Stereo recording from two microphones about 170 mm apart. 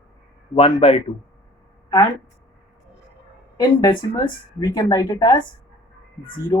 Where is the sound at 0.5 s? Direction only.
35° left (ahead or behind).